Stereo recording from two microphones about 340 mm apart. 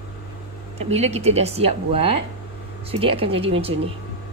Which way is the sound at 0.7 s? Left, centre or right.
Centre.